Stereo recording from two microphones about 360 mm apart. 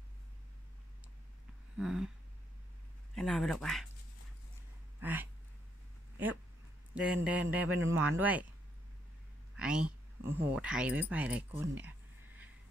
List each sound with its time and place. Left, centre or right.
1.8 s speech: centre
3.2 s speech: centre
5.0 s a sound: centre
7.0 s speech: centre
9.6 s a sound: centre
10.2 s speech: centre